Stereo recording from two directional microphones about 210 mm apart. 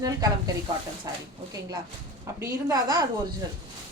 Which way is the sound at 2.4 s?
15° right (ahead or behind).